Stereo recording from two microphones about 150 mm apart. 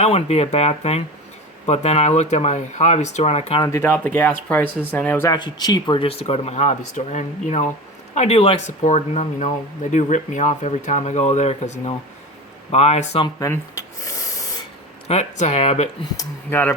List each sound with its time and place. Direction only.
0.0 s speech: 45° left (ahead or behind)
3.6 s speech: 20° left (ahead or behind)
5.3 s speech: 30° left (ahead or behind)
8.6 s speech: 50° left (ahead or behind)
13.5 s a sound: 20° left (ahead or behind)
15.0 s speech: 45° left (ahead or behind)
16.5 s speech: 10° left (ahead or behind)